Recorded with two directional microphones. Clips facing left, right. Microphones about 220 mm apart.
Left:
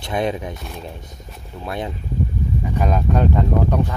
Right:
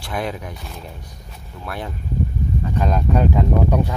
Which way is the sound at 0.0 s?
20° left (ahead or behind).